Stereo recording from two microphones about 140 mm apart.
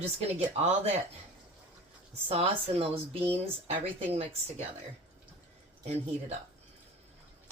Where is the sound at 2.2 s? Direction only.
45° right (ahead or behind).